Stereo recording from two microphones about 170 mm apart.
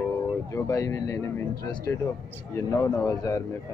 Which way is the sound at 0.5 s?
15° left (ahead or behind).